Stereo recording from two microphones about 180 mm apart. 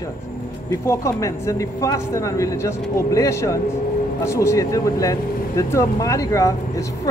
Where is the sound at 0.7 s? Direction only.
15° left (ahead or behind).